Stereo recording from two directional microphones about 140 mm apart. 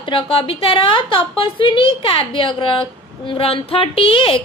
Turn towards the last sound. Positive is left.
turn(degrees=40)  # may be behind; listen again after turning